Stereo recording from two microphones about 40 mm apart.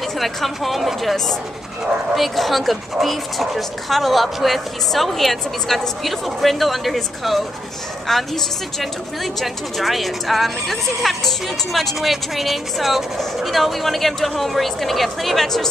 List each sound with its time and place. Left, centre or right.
0.2 s speech: centre
2.1 s speech: centre